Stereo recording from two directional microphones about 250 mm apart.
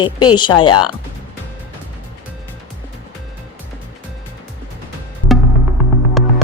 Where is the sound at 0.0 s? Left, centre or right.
Centre.